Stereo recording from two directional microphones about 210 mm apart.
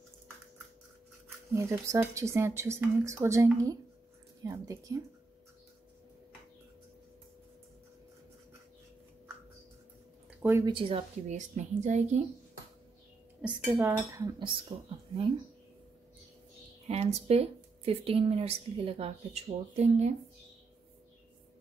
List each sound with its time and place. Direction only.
1.5 s speech: 15° right (ahead or behind)
10.4 s speech: 10° right (ahead or behind)
10.7 s a woman's voice: 25° right (ahead or behind)
13.4 s speech: 10° right (ahead or behind)
16.8 s speech: 30° right (ahead or behind)